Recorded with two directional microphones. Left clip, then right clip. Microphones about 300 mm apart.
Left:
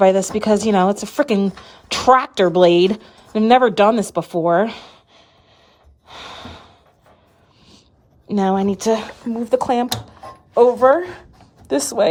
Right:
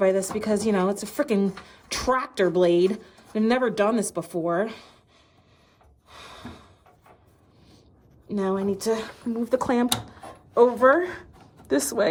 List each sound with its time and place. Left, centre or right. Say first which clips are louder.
0.0 s a woman's voice: left 8 dB; centre
6.1 s snort: left 8 dB; centre
8.3 s a woman's voice: left 8 dB; centre